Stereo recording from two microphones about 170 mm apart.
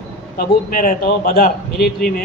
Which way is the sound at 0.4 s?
55° left (ahead or behind).